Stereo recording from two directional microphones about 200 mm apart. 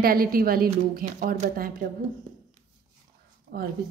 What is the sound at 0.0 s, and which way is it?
A woman's voice, 45° right (ahead or behind).